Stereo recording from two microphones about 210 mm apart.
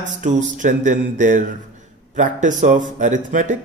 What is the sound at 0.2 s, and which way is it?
Speech, 35° right (ahead or behind).